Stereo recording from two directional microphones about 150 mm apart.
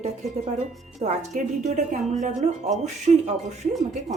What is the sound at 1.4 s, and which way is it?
A woman's voice, 55° right (ahead or behind).